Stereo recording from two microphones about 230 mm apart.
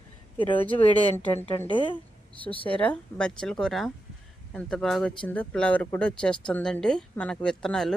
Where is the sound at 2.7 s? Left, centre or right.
Centre.